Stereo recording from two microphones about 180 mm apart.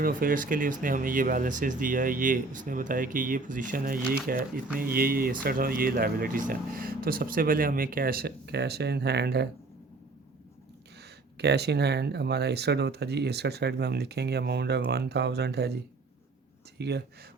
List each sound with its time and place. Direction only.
0.0 s speech: 50° right (ahead or behind)
11.3 s speech: 65° right (ahead or behind)
16.7 s speech: 65° right (ahead or behind)